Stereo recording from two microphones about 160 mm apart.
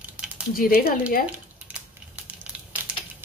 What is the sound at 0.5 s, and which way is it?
Speech, 65° left (ahead or behind).